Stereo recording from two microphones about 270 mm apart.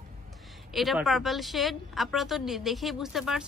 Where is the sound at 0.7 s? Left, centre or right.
Centre.